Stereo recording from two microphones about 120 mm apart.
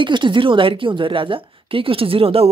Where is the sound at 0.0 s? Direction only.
40° right (ahead or behind).